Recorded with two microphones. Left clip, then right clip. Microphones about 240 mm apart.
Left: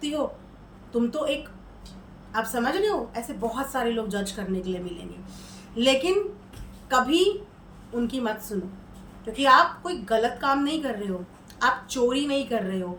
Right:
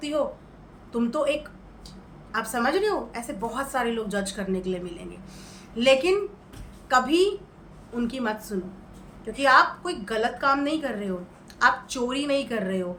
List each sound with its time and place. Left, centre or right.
0.9 s a woman's voice: centre